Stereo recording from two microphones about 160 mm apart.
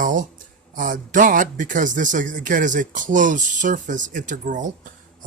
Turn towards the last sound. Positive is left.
turn(degrees=-50)  # may be behind; listen again after turning